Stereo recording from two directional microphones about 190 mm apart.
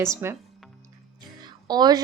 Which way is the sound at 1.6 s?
20° right (ahead or behind).